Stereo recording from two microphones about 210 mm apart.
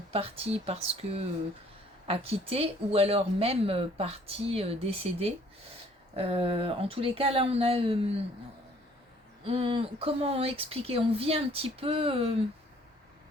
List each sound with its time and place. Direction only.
0.1 s speech: 25° right (ahead or behind)
9.5 s speech: 25° right (ahead or behind)